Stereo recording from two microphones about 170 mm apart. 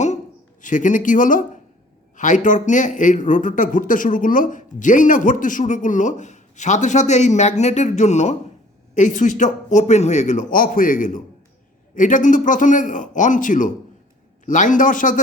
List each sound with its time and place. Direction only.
0.6 s speech: 50° left (ahead or behind)